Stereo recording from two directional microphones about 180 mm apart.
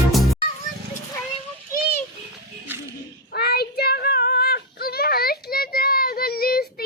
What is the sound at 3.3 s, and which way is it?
Child singing, 60° left (ahead or behind).